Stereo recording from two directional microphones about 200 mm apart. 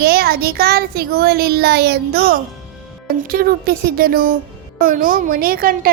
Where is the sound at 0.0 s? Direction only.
50° right (ahead or behind).